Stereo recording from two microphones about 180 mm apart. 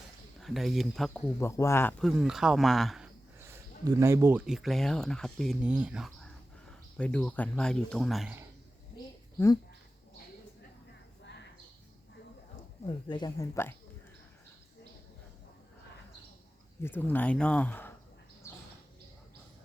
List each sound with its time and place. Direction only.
0.3 s speech: centre (ahead or behind)
3.4 s speech: 15° right (ahead or behind)
6.9 s speech: 5° left (ahead or behind)
12.8 s speech: 25° left (ahead or behind)
16.8 s speech: 10° left (ahead or behind)
18.4 s a sound: 15° left (ahead or behind)